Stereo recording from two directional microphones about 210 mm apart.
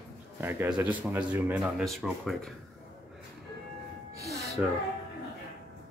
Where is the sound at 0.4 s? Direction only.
10° right (ahead or behind).